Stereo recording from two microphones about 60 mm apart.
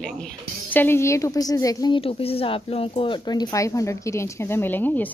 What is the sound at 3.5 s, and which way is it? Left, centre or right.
A woman's voice, left.